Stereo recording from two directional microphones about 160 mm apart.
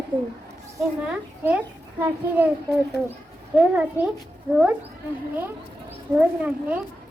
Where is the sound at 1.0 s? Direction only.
10° right (ahead or behind).